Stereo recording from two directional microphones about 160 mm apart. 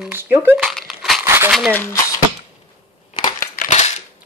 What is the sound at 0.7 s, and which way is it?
Crumpling, centre (ahead or behind).